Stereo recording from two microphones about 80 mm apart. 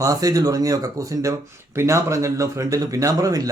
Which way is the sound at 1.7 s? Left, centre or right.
Right.